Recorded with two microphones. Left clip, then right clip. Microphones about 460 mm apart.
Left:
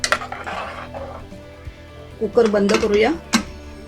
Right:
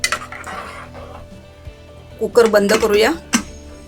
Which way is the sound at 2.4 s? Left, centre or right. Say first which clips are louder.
Right 4 dB; right.